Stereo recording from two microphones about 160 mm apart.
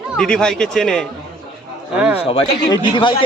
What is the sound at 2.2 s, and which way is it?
Speech, 30° left (ahead or behind).